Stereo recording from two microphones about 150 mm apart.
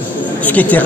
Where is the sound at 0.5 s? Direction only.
10° left (ahead or behind).